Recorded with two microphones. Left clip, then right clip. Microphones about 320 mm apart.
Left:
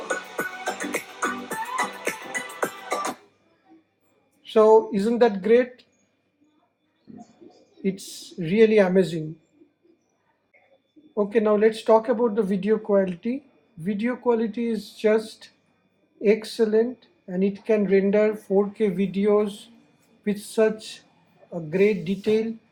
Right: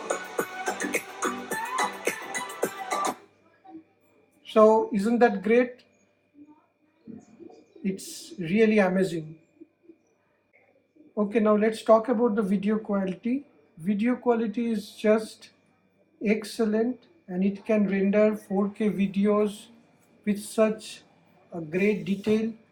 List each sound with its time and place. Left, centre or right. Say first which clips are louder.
0.0 s music: left 2 dB; centre
4.4 s speech: left 3 dB; left
7.8 s speech: left 5 dB; left
11.2 s speech: left 4 dB; left
20.6 s speech: left 3 dB; left